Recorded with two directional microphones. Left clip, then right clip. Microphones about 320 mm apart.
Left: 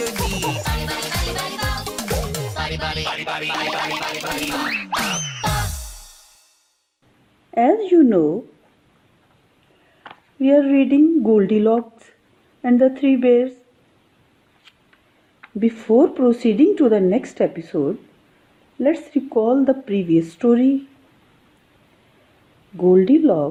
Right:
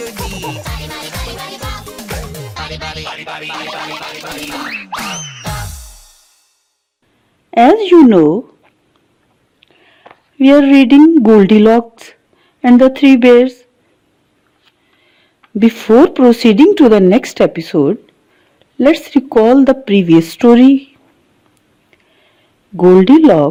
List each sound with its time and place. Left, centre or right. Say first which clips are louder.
0.0 s music: even; centre
7.5 s speech: right 8 dB; right
10.4 s speech: right 8 dB; right
15.5 s speech: right 8 dB; right
22.8 s speech: right 8 dB; right